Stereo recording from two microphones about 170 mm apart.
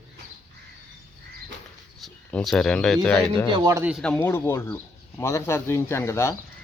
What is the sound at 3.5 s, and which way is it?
Speech, 20° right (ahead or behind).